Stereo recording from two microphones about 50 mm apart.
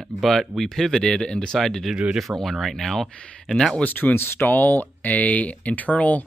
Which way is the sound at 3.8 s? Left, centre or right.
Left.